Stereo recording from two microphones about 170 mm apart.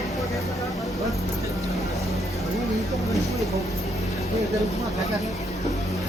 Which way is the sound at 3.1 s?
Centre (ahead or behind).